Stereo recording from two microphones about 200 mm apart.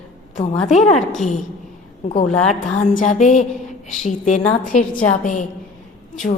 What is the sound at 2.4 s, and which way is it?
A woman's voice, 35° left (ahead or behind).